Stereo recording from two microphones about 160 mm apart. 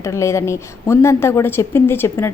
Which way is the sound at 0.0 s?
20° left (ahead or behind).